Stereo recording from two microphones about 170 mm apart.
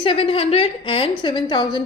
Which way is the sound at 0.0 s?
30° left (ahead or behind).